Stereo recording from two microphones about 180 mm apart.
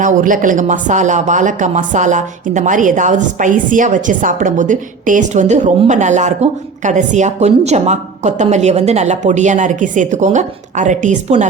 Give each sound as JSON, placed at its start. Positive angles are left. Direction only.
{"t": 0.0, "sound": "speech", "side_deg": -45}